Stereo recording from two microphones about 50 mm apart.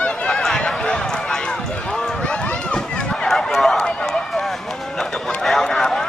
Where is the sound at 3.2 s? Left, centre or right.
Centre.